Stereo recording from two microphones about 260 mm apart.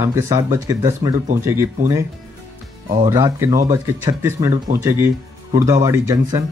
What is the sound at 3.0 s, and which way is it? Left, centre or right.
Speech, centre.